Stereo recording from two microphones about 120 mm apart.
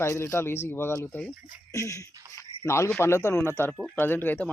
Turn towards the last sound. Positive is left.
turn(degrees=15)  # may be behind; listen again after turning